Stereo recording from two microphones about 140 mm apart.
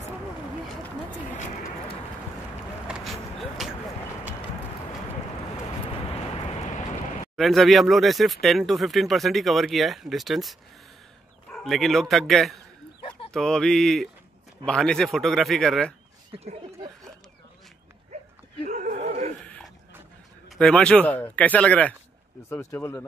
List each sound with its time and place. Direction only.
2.9 s a sound: centre (ahead or behind)
7.3 s speech: centre (ahead or behind)
11.6 s speech: centre (ahead or behind)
18.1 s dog: 45° right (ahead or behind)
18.7 s neigh: 65° right (ahead or behind)
19.4 s a sound: 10° left (ahead or behind)
20.4 s speech: 5° left (ahead or behind)